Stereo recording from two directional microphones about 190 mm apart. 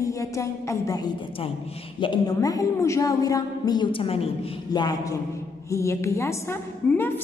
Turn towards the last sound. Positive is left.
turn(degrees=10)  # may be behind; listen again after turning